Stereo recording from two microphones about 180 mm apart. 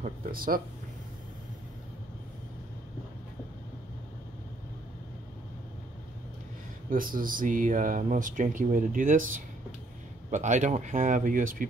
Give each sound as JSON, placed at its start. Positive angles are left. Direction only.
{"t": 0.0, "sound": "speech", "side_deg": -55}
{"t": 6.9, "sound": "speech", "side_deg": -50}